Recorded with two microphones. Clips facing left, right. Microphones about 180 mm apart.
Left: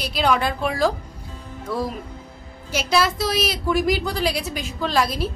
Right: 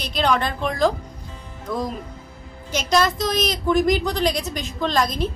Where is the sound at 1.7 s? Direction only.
15° right (ahead or behind).